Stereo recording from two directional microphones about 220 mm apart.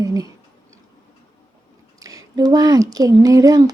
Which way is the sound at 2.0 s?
15° right (ahead or behind).